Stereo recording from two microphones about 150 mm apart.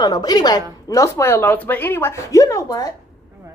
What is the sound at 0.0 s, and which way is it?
A woman's voice, 25° left (ahead or behind).